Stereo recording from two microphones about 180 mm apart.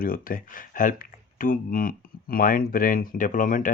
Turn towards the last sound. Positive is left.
turn(degrees=50)  # may be behind; listen again after turning